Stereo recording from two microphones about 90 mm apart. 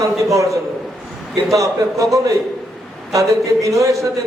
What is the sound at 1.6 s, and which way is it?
A man's voice, 35° right (ahead or behind).